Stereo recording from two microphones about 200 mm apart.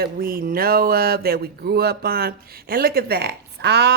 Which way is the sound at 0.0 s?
45° right (ahead or behind).